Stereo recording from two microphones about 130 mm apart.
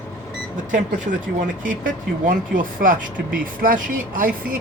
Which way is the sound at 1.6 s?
90° right.